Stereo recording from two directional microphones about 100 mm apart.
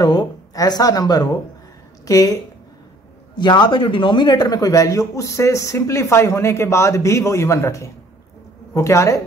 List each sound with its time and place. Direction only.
0.0 s a woman's voice: 45° left (ahead or behind)
3.3 s a man's voice: 45° left (ahead or behind); by 9.2 s 30° left (ahead or behind)